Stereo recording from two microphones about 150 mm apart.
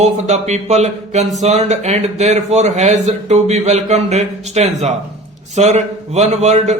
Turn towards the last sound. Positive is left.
turn(degrees=-50)  # may be behind; listen again after turning